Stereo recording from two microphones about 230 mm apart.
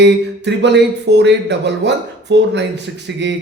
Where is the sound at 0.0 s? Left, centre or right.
Right.